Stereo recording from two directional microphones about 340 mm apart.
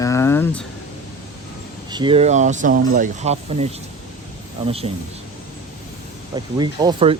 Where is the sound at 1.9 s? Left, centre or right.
Centre.